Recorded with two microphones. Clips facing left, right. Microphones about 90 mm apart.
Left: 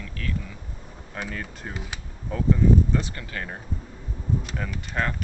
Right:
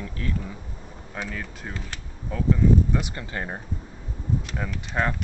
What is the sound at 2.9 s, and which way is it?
Speech, 20° right (ahead or behind).